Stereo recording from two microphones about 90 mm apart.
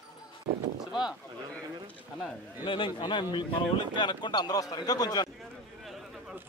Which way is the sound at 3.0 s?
55° left (ahead or behind).